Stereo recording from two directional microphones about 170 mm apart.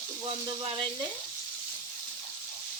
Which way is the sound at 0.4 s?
30° right (ahead or behind).